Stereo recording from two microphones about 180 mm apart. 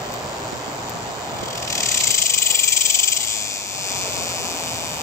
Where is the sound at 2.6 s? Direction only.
15° left (ahead or behind).